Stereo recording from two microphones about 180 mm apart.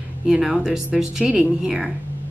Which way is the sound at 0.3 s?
5° right (ahead or behind).